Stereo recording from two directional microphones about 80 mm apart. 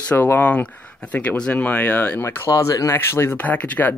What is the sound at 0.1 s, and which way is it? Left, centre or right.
Speech, left.